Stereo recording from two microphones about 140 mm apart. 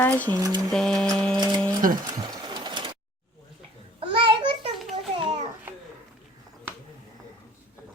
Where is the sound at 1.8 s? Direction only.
85° right.